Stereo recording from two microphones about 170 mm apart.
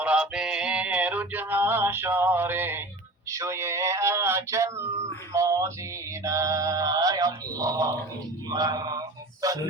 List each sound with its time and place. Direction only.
0.0 s male singing: 5° right (ahead or behind)
3.2 s a sound: 15° right (ahead or behind)
6.2 s male singing: 20° right (ahead or behind)
8.4 s mantra: 20° right (ahead or behind)